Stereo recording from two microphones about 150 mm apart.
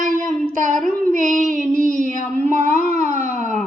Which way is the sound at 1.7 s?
60° right (ahead or behind).